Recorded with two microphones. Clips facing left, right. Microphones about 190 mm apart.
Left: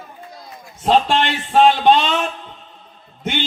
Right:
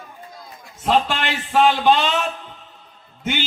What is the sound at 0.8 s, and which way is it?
Speech, 25° left (ahead or behind).